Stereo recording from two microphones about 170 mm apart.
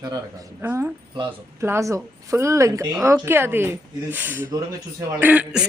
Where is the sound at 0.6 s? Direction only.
10° right (ahead or behind).